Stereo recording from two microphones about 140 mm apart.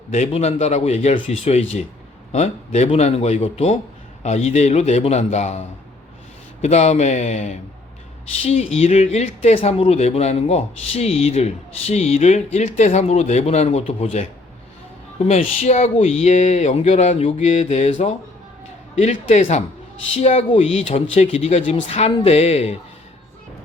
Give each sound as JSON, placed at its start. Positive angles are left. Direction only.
{"t": 0.1, "sound": "speech", "side_deg": 50}